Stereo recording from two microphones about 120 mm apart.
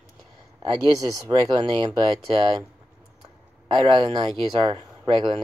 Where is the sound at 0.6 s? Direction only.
35° right (ahead or behind).